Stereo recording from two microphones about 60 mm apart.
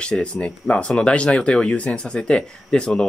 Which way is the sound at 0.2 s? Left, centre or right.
Left.